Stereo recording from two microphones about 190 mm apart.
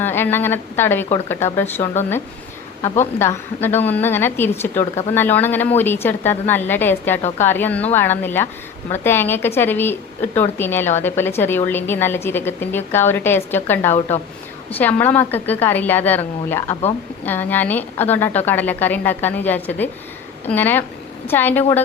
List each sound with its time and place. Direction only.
0.0 s a woman's voice: 10° left (ahead or behind)
2.8 s a woman's voice: 40° left (ahead or behind)
3.2 s a woman's voice: 10° left (ahead or behind)
7.2 s a woman's voice: 35° left (ahead or behind)
7.4 s a woman's voice: 10° left (ahead or behind)